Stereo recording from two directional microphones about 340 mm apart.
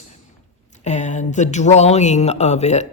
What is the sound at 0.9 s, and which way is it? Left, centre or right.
A woman's voice, left.